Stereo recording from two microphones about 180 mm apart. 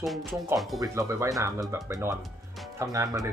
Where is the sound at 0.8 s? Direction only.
15° right (ahead or behind).